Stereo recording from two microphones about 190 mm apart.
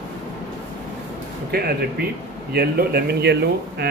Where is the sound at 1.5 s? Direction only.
55° right (ahead or behind).